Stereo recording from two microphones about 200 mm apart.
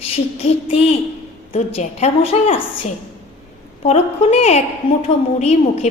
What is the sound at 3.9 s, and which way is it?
A woman's voice, 35° left (ahead or behind).